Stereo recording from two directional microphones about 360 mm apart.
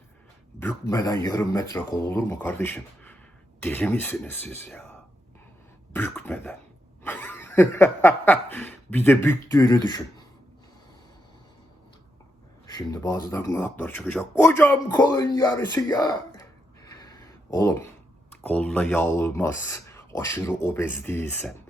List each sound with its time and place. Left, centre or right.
0.6 s speech: centre
5.9 s speech: centre
7.0 s chuckle: centre
12.6 s speech: centre
17.5 s speech: centre